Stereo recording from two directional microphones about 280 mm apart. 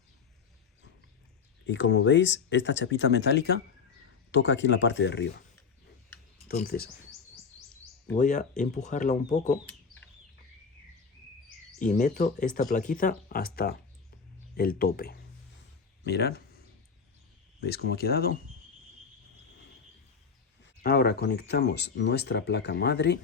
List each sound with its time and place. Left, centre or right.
1.6 s speech: left
6.5 s speech: left
8.1 s speech: left
11.8 s speech: left
17.6 s speech: left
20.8 s speech: left